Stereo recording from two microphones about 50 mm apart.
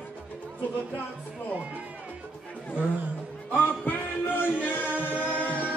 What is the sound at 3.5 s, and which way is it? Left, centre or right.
Music, left.